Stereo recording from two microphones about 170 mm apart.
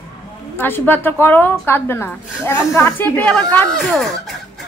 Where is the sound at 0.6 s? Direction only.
10° left (ahead or behind).